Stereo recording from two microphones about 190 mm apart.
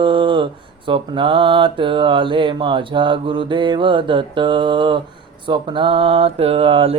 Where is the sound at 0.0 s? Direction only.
25° right (ahead or behind).